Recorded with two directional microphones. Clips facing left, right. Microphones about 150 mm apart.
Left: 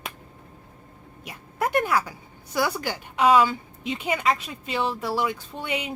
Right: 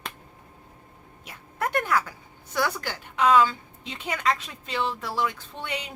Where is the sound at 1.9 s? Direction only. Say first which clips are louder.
Left 1 dB; 10° left (ahead or behind).